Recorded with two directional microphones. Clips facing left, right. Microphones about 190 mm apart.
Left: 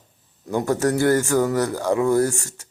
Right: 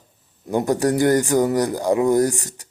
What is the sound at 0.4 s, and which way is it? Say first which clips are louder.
Speech: right 2 dB; 15° right (ahead or behind).